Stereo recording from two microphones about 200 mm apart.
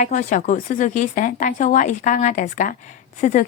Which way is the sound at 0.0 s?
35° left (ahead or behind).